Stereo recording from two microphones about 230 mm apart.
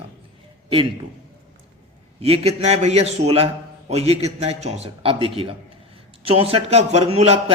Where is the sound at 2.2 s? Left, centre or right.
Right.